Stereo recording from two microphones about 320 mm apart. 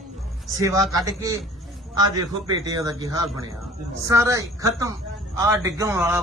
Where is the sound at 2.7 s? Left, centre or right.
Centre.